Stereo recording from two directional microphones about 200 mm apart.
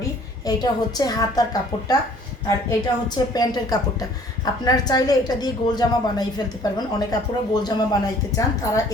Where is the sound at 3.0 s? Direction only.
20° left (ahead or behind).